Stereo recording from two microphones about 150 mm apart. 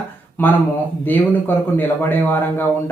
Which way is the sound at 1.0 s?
15° left (ahead or behind).